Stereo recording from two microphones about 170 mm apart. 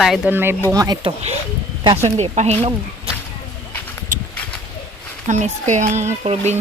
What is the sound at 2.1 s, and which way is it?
Speech, 40° right (ahead or behind).